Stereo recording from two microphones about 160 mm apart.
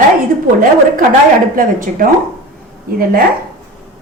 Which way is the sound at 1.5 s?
60° right (ahead or behind).